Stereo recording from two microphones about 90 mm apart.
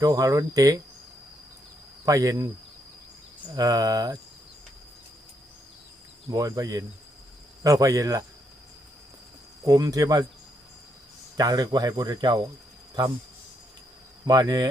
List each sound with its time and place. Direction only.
0.0 s cricket: 40° right (ahead or behind)
2.0 s cricket: 40° right (ahead or behind)
3.5 s speech: 45° right (ahead or behind)
6.3 s cricket: 40° right (ahead or behind)
9.6 s speech: 45° right (ahead or behind)
11.3 s speech: 50° right (ahead or behind)
14.3 s speech: 45° right (ahead or behind)